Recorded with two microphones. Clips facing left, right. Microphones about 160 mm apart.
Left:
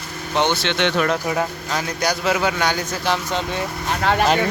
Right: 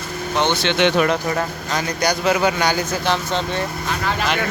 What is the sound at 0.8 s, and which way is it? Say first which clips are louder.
Speech: right 4 dB; 15° right (ahead or behind).